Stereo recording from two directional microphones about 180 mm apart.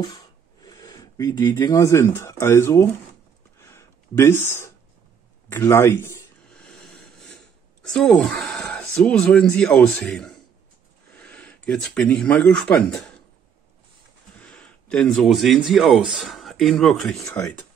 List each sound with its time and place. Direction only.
0.6 s speech: 20° left (ahead or behind)
3.6 s a sound: 15° left (ahead or behind)
7.9 s speech: 5° left (ahead or behind)
14.4 s speech: 5° left (ahead or behind)